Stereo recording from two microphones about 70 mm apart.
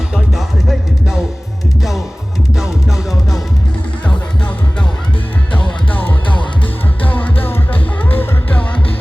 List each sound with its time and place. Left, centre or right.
0.1 s music: centre
2.6 s music: centre
5.5 s music: left